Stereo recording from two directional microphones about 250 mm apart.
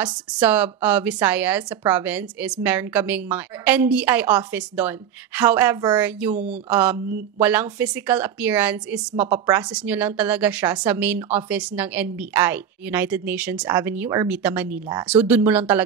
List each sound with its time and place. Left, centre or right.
0.0 s a woman's voice: centre